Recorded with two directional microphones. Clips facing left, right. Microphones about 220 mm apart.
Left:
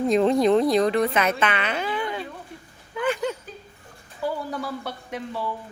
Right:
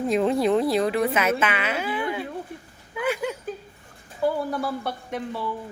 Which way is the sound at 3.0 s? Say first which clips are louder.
Left 1 dB; 10° right (ahead or behind).